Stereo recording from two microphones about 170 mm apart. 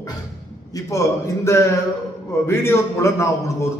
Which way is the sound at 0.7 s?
20° left (ahead or behind).